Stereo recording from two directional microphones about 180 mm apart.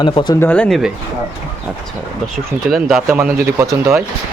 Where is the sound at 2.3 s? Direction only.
Centre (ahead or behind).